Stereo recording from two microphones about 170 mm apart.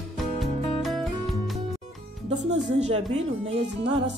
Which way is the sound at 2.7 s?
40° right (ahead or behind).